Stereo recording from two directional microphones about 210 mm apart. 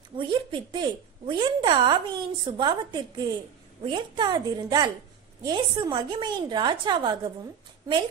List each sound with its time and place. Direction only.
0.2 s speech: 20° right (ahead or behind)